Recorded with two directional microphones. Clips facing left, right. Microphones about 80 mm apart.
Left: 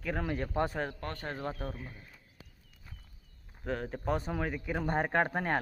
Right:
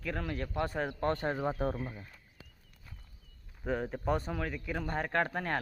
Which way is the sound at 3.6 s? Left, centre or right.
Centre.